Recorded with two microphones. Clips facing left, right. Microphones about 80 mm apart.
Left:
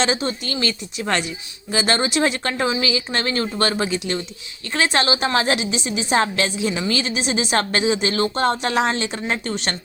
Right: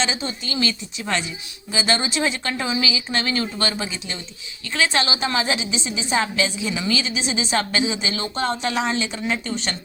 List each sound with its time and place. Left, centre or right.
0.0 s a woman's voice: left